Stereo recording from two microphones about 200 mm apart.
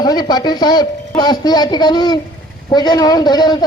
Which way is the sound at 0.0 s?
20° left (ahead or behind).